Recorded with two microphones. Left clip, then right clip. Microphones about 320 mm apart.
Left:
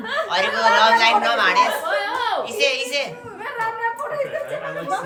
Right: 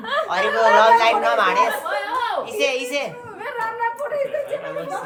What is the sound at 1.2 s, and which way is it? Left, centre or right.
A woman's voice, centre.